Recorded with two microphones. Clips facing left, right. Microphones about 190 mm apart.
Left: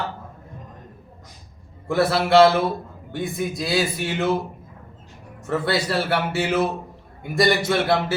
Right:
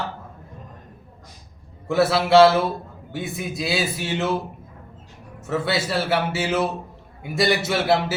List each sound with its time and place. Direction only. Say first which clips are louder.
1.9 s a man's voice: right 1 dB; centre (ahead or behind)
5.5 s a man's voice: left 1 dB; centre (ahead or behind)